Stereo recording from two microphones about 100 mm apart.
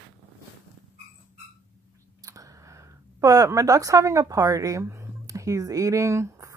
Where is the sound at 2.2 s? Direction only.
35° right (ahead or behind).